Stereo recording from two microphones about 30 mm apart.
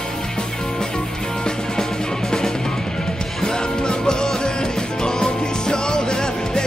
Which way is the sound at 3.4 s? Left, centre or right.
Left.